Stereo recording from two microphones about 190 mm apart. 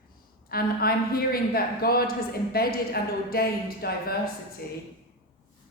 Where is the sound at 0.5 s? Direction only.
50° left (ahead or behind).